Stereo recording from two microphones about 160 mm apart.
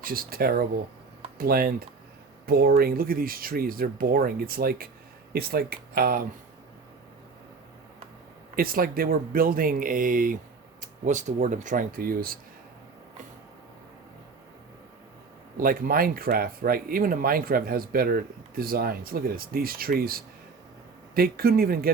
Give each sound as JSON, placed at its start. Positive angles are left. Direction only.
{"t": 0.0, "sound": "speech", "side_deg": -65}
{"t": 8.5, "sound": "speech", "side_deg": -65}
{"t": 15.5, "sound": "speech", "side_deg": -60}